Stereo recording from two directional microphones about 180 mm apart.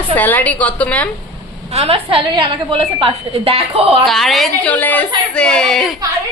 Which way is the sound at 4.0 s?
Centre (ahead or behind).